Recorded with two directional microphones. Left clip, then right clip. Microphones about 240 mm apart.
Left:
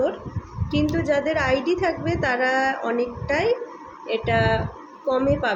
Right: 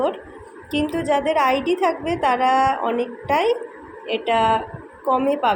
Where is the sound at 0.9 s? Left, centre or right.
Centre.